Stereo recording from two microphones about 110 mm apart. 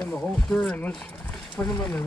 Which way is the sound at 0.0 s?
10° left (ahead or behind).